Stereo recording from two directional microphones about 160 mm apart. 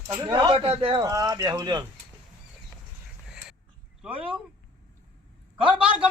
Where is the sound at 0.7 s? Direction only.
35° right (ahead or behind).